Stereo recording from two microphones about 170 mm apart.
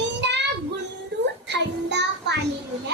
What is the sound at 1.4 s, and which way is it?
Child singing, 90° right.